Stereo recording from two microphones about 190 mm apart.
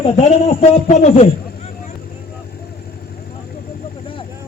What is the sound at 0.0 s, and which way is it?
A man's voice, 35° left (ahead or behind).